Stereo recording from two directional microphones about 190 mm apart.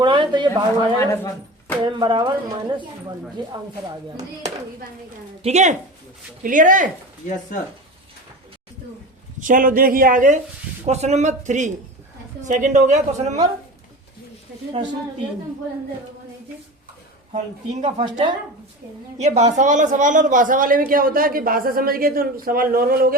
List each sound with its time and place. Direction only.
0.0 s speech: 25° right (ahead or behind)
0.9 s speech: 15° left (ahead or behind)
1.8 s speech: 25° right (ahead or behind)
5.4 s a woman's voice: 35° right (ahead or behind)
9.4 s a woman's voice: 45° right (ahead or behind)
17.3 s a woman's voice: 35° right (ahead or behind)
18.0 s speech: 20° right (ahead or behind)
19.2 s speech: 35° right (ahead or behind)